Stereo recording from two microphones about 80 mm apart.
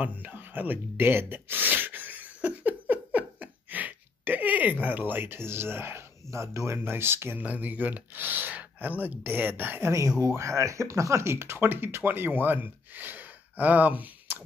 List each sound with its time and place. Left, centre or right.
0.0 s a sound: right
6.8 s speech: right
7.4 s speech: centre